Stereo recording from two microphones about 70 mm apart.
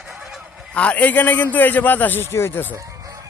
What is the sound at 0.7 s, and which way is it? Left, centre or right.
A man's voice, centre.